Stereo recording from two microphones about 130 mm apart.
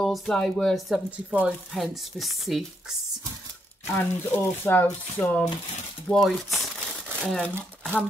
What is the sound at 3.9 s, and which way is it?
Speech, 15° left (ahead or behind).